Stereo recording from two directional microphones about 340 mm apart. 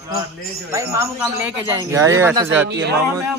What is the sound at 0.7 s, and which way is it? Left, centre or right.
Speech, centre.